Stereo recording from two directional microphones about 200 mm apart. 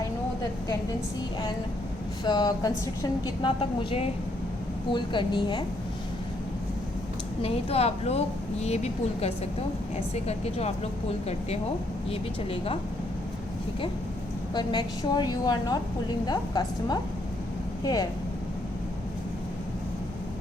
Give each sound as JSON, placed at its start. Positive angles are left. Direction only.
{"t": 2.2, "sound": "a woman's voice", "side_deg": 20}
{"t": 7.4, "sound": "a woman's voice", "side_deg": 30}
{"t": 14.5, "sound": "a woman's voice", "side_deg": 20}